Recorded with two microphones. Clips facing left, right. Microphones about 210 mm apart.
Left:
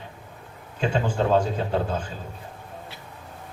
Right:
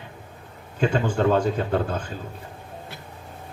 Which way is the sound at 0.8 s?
55° right (ahead or behind).